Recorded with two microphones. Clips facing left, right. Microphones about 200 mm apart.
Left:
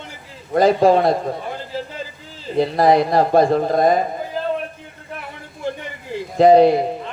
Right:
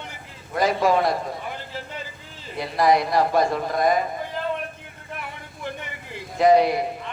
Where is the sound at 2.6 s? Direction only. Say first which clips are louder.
Left 5 dB; 30° left (ahead or behind).